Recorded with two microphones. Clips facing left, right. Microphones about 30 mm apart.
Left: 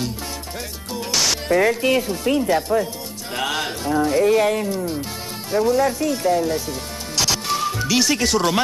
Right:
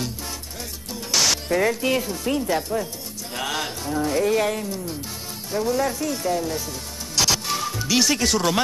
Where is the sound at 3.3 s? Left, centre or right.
Centre.